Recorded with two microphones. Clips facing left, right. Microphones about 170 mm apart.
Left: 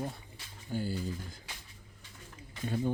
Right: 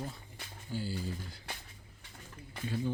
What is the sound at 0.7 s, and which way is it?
Speech, 50° left (ahead or behind).